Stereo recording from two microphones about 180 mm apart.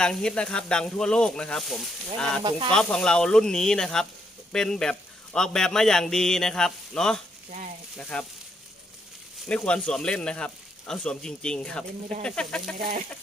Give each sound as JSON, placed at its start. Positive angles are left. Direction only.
{"t": 0.0, "sound": "a man's voice", "side_deg": 5}
{"t": 2.4, "sound": "speech", "side_deg": -25}
{"t": 2.7, "sound": "a man's voice", "side_deg": 5}
{"t": 9.5, "sound": "a man's voice", "side_deg": 5}